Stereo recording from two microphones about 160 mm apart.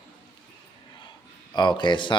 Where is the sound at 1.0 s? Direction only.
30° left (ahead or behind).